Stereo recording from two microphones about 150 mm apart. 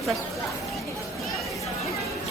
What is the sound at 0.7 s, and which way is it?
Chatter, centre (ahead or behind).